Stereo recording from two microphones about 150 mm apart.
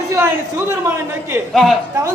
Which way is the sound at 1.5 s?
Centre (ahead or behind).